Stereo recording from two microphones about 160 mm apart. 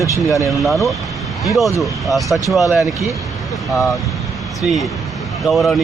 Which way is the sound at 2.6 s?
20° left (ahead or behind).